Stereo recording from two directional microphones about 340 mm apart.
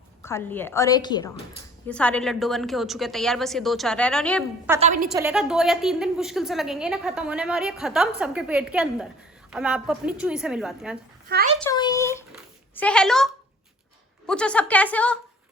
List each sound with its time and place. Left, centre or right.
0.2 s a woman's voice: centre
4.8 s a woman's voice: right
5.0 s a woman's voice: centre
11.3 s a woman's voice: right
11.6 s a sound: centre
14.3 s a woman's voice: centre